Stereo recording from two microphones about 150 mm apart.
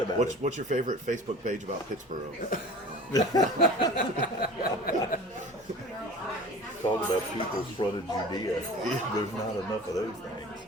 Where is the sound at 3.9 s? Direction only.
75° left (ahead or behind).